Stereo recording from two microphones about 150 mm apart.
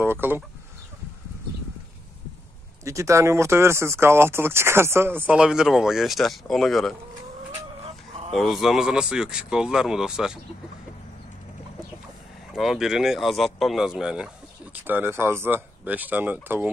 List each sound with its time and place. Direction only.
0.0 s speech: 15° right (ahead or behind)
2.8 s speech: 20° right (ahead or behind); by 7.0 s centre (ahead or behind)
8.3 s speech: centre (ahead or behind)
12.5 s speech: 5° right (ahead or behind)